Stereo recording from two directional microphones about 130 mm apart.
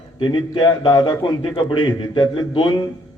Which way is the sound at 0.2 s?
40° left (ahead or behind).